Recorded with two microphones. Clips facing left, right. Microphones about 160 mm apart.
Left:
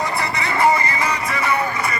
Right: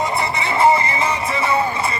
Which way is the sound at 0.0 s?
25° right (ahead or behind).